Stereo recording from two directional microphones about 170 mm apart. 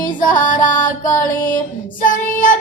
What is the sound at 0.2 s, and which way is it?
Music, 50° left (ahead or behind).